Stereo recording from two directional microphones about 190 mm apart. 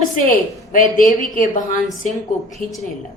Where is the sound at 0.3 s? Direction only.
45° left (ahead or behind).